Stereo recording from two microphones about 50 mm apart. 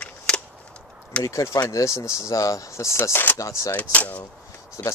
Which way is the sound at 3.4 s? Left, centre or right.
Left.